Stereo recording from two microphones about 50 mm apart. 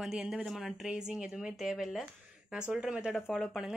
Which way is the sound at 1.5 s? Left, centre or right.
Centre.